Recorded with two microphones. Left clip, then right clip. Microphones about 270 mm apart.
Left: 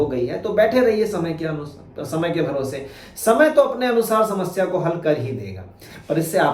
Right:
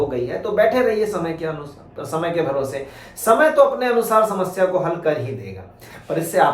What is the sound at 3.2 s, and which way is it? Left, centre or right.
Speech, centre.